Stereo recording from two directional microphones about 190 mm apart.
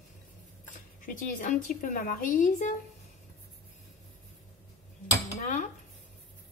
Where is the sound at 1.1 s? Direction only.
45° left (ahead or behind).